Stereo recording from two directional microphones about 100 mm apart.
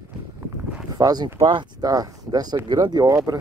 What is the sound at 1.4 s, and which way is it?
Speech, 65° right (ahead or behind).